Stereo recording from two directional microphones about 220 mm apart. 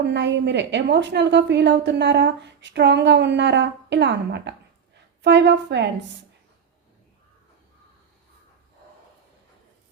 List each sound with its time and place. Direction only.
0.0 s a woman's voice: 55° right (ahead or behind)